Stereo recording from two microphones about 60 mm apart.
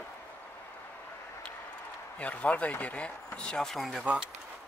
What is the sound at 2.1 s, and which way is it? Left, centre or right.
Speech, left.